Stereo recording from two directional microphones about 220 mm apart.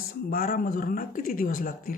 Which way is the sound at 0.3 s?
40° left (ahead or behind).